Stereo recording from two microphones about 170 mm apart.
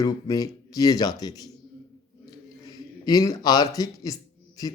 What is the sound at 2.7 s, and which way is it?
A man's voice, 20° left (ahead or behind).